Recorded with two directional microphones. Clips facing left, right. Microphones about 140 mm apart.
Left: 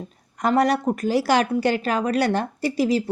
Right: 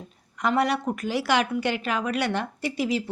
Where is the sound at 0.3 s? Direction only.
40° left (ahead or behind).